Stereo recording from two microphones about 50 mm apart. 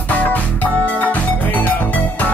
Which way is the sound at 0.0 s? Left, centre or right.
Left.